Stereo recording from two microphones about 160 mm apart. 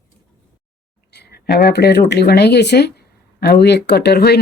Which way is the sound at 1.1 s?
90° left.